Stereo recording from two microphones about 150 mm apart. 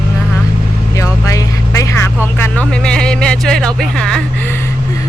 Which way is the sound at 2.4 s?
10° left (ahead or behind).